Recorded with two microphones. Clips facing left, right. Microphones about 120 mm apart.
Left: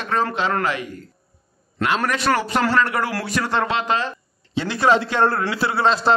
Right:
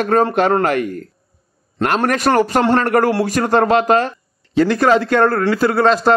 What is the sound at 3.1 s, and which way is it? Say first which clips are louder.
A man's voice: right 8 dB; 40° right (ahead or behind).